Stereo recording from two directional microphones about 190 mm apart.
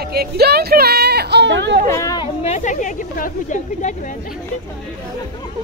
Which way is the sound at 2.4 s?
40° left (ahead or behind).